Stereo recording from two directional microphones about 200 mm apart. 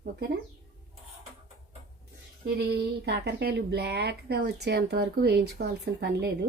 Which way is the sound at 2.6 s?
55° right (ahead or behind).